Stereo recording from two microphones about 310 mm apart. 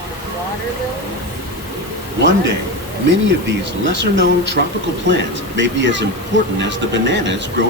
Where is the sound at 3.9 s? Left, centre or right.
Right.